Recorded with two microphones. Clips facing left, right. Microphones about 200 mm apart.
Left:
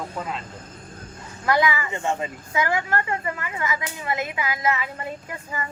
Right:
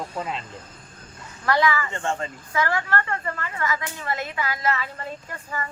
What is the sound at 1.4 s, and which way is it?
Speech, 15° left (ahead or behind).